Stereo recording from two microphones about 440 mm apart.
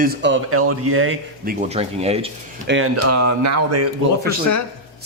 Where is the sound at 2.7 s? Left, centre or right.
Right.